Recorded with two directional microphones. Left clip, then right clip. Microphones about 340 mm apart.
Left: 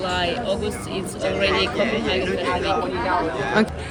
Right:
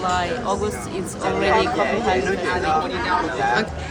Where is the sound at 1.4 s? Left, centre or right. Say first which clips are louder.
Right 2 dB; centre.